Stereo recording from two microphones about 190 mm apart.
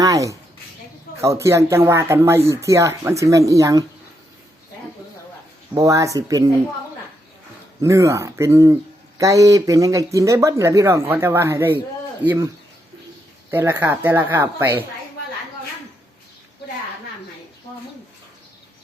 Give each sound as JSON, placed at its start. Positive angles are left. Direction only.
{"t": 0.0, "sound": "a sound", "side_deg": -15}
{"t": 1.2, "sound": "speech", "side_deg": -15}
{"t": 5.7, "sound": "speech", "side_deg": -15}
{"t": 7.8, "sound": "speech", "side_deg": -15}
{"t": 13.5, "sound": "speech", "side_deg": -10}